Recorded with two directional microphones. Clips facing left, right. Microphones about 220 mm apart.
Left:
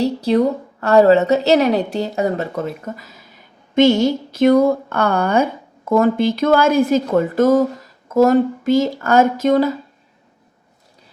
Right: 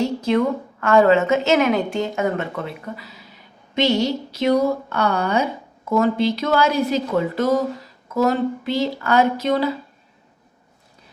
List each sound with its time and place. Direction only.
0.0 s a woman's voice: 35° left (ahead or behind)